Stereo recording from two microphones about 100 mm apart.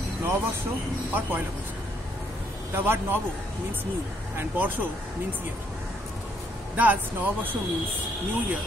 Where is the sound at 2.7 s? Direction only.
20° right (ahead or behind).